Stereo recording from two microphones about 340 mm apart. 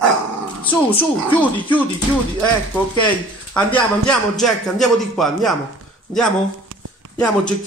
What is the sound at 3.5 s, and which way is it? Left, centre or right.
Speech, centre.